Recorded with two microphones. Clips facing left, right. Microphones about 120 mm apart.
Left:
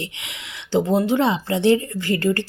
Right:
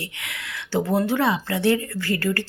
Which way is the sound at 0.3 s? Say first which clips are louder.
Left 3 dB; 20° left (ahead or behind).